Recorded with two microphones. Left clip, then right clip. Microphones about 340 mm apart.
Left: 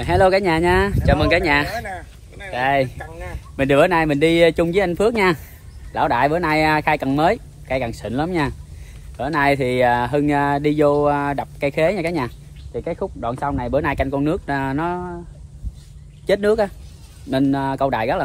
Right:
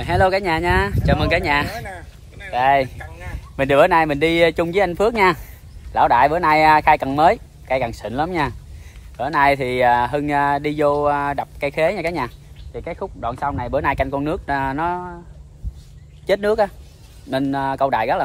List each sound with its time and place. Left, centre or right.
0.0 s speech: centre
1.9 s a sound: centre
2.5 s speech: centre
3.0 s a sound: centre
3.5 s speech: centre
16.3 s speech: centre